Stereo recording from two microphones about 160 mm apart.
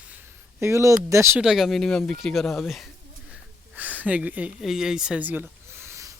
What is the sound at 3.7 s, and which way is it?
Speech, 10° right (ahead or behind).